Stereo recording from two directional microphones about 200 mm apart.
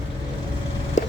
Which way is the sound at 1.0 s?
35° left (ahead or behind).